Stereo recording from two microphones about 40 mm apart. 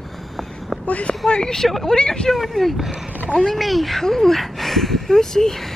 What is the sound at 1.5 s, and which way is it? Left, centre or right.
Speech, centre.